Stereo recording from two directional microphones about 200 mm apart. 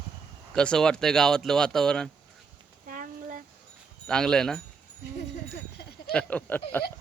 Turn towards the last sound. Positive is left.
turn(degrees=10)  # may be behind; listen again after turning